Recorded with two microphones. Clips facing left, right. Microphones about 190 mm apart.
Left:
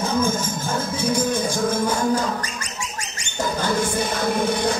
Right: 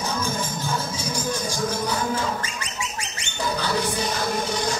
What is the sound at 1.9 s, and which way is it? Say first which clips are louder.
Livestock: left 4 dB; 45° left (ahead or behind).